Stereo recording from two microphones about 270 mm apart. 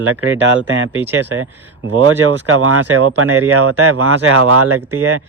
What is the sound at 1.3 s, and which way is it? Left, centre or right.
Speech, right.